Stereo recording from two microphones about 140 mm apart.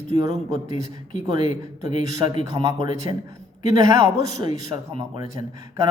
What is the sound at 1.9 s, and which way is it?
Speech, 55° left (ahead or behind).